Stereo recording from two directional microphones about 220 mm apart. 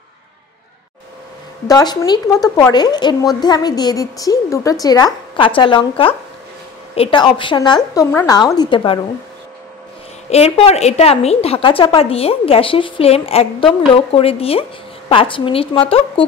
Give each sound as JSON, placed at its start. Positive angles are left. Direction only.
{"t": 1.7, "sound": "a woman's voice", "side_deg": 20}
{"t": 10.3, "sound": "a woman's voice", "side_deg": 30}